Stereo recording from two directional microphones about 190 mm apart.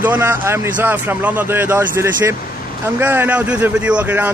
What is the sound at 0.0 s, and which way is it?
A man's voice, 10° right (ahead or behind).